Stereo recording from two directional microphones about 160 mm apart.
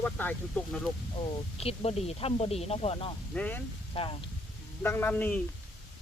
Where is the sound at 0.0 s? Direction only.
10° left (ahead or behind).